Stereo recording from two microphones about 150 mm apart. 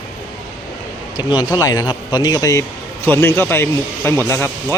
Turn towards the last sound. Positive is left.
turn(degrees=15)  # may be behind; listen again after turning